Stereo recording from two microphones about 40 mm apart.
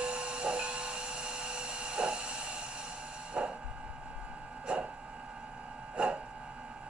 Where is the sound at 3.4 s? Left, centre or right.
Right.